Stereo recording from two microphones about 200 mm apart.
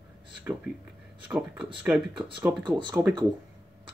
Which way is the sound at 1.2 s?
5° right (ahead or behind).